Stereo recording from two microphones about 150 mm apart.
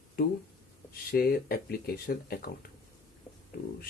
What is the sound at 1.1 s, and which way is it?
Speech, 90° left.